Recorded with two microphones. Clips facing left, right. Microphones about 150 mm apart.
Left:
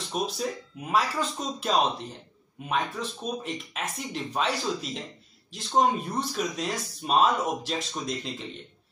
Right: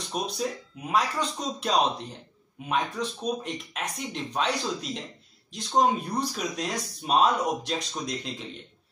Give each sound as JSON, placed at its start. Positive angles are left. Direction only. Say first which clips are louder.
{"t": 0.0, "sound": "speech", "louder": "even", "side_deg": 0}